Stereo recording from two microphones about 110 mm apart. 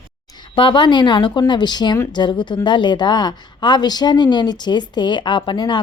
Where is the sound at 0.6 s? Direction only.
50° left (ahead or behind).